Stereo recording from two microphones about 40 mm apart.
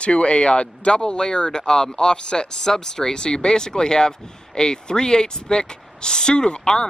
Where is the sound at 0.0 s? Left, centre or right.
Left.